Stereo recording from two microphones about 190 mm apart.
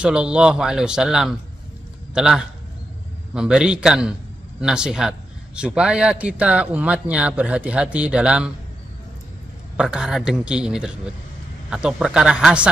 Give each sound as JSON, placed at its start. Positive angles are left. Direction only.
{"t": 0.0, "sound": "a man's voice", "side_deg": -5}
{"t": 9.8, "sound": "speech", "side_deg": -5}